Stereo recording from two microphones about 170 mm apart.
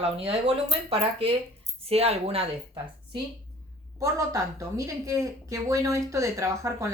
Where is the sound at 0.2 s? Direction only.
35° right (ahead or behind).